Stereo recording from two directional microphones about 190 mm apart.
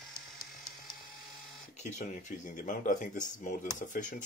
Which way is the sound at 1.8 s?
40° left (ahead or behind).